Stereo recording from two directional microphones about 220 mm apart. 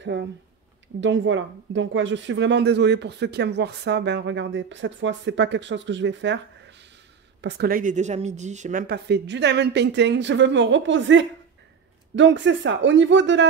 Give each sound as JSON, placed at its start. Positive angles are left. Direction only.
{"t": 0.0, "sound": "a woman's voice", "side_deg": -55}
{"t": 8.8, "sound": "speech", "side_deg": -50}